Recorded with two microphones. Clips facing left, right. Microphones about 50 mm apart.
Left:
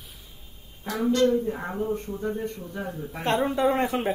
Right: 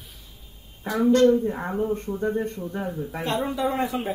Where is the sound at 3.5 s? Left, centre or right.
Left.